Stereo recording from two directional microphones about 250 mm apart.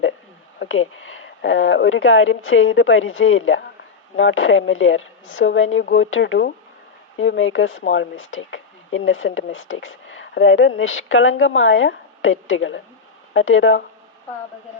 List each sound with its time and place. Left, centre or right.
0.6 s speech: left